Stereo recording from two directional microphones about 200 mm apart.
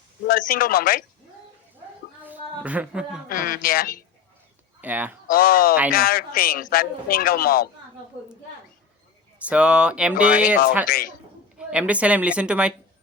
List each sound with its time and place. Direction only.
0.3 s a man's voice: 45° left (ahead or behind)
2.2 s a sound: 10° right (ahead or behind)
3.2 s a man's voice: 45° left (ahead or behind)
4.8 s speech: 10° right (ahead or behind)
5.3 s a man's voice: 45° left (ahead or behind)
9.4 s speech: 5° right (ahead or behind)
10.8 s a man's voice: 45° left (ahead or behind)
11.5 s speech: 5° right (ahead or behind)